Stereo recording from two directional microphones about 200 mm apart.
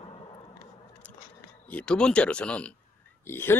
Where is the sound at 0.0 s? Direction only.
25° left (ahead or behind).